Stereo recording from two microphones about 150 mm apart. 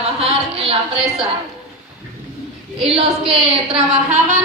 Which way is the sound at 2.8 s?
40° right (ahead or behind).